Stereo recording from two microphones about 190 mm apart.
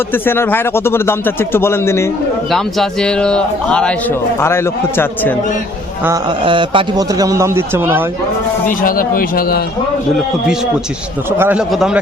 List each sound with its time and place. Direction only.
0.1 s speech: 10° left (ahead or behind)
2.5 s a man's voice: centre (ahead or behind)
6.4 s a man's voice: 25° right (ahead or behind)
8.6 s speech: 45° left (ahead or behind)
11.3 s a man's voice: 10° right (ahead or behind)